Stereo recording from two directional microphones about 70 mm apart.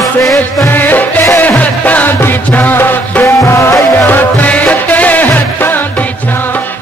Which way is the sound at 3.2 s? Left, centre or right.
Left.